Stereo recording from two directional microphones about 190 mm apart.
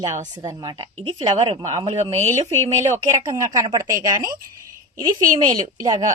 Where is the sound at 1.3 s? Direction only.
30° right (ahead or behind).